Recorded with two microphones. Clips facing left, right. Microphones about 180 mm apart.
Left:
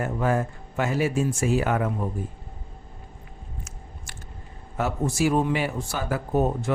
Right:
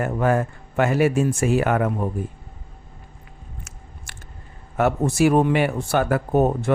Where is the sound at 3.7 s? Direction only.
65° right (ahead or behind).